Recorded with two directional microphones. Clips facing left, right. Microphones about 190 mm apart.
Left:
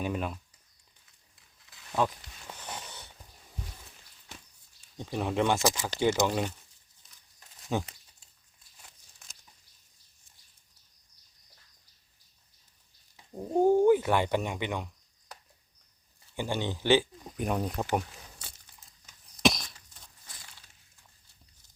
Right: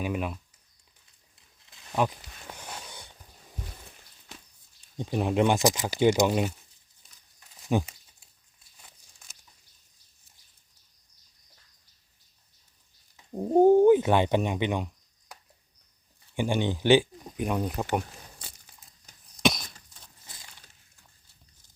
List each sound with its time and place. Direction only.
0.0 s speech: 5° right (ahead or behind)
1.7 s a sound: 20° right (ahead or behind)
2.5 s a sound: 10° right (ahead or behind)
4.9 s speech: 15° right (ahead or behind)
7.7 s speech: 15° right (ahead or behind)
13.5 s speech: 20° right (ahead or behind)
16.3 s speech: 15° right (ahead or behind)
17.2 s speech: centre (ahead or behind)
19.4 s a sound: centre (ahead or behind)